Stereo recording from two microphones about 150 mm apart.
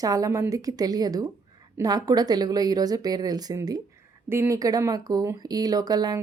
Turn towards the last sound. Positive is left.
turn(degrees=-25)  # may be behind; listen again after turning